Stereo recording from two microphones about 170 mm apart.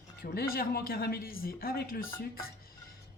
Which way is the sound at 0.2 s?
65° left (ahead or behind).